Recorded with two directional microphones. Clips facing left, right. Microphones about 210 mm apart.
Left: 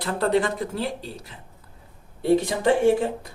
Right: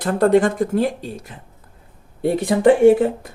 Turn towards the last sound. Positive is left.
turn(degrees=-55)  # may be behind; listen again after turning